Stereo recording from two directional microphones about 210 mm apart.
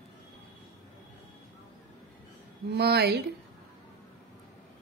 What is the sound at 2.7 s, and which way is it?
Speech, 50° right (ahead or behind).